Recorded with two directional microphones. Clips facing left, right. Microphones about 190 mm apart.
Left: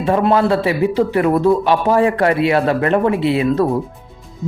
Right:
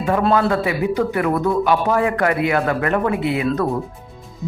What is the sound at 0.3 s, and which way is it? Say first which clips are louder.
A man's voice: left 3 dB; 30° left (ahead or behind).